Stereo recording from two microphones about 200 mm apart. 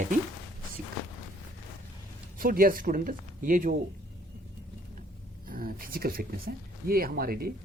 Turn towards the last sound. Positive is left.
turn(degrees=-50)  # may be behind; listen again after turning